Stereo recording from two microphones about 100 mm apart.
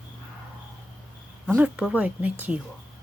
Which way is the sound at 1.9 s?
15° right (ahead or behind).